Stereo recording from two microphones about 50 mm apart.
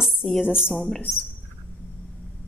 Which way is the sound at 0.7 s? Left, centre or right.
Centre.